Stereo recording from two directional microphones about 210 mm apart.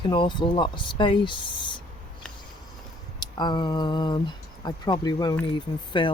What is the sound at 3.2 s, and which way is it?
Speech, 20° left (ahead or behind).